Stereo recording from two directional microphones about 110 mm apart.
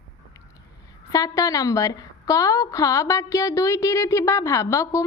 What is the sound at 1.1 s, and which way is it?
A woman's voice, 30° left (ahead or behind).